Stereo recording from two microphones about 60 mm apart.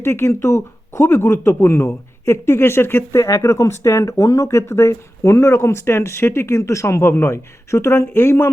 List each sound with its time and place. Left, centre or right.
0.0 s speech: left
3.2 s speech: left